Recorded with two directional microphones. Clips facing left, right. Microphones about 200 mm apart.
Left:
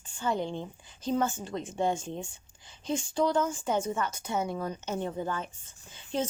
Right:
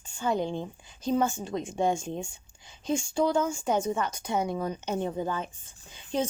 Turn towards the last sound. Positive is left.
turn(degrees=-15)  # may be behind; listen again after turning